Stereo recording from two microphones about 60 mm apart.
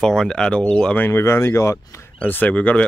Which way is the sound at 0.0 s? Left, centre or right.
Centre.